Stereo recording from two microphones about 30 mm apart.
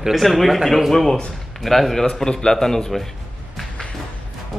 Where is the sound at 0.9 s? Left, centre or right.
Centre.